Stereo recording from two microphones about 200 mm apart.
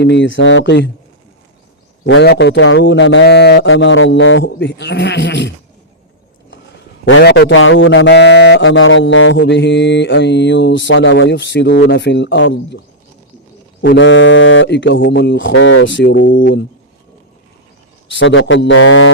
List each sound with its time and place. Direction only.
0.0 s a man's voice: 60° left (ahead or behind)
2.0 s a man's voice: 60° left (ahead or behind)
7.0 s a man's voice: 60° left (ahead or behind)
13.8 s mantra: 65° left (ahead or behind)
16.4 s speech: 45° left (ahead or behind)
18.1 s mantra: 65° left (ahead or behind)